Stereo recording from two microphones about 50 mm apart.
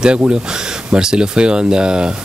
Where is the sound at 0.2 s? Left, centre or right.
Centre.